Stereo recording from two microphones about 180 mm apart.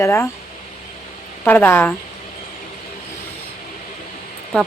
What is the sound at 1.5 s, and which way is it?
Speech, 10° left (ahead or behind).